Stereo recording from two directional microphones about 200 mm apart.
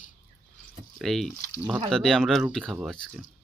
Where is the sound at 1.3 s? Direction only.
15° left (ahead or behind).